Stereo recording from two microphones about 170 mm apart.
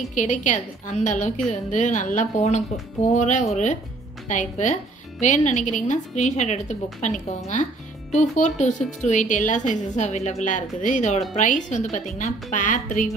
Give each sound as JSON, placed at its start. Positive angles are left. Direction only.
{"t": 0.1, "sound": "a woman's voice", "side_deg": 50}